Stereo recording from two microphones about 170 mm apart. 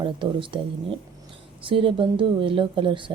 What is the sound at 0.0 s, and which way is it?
Speech, 30° right (ahead or behind).